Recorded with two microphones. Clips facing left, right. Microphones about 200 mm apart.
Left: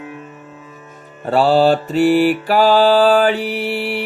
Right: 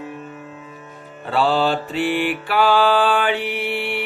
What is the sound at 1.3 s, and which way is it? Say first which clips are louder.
Music: left 6 dB; 40° left (ahead or behind).